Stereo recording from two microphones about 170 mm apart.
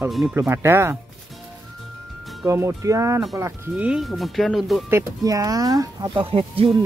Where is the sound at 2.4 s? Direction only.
15° right (ahead or behind); by 4.8 s centre (ahead or behind).